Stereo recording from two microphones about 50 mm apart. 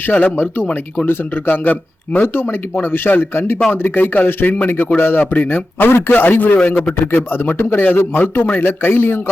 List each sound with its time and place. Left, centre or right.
0.1 s speech: left
2.9 s speech: left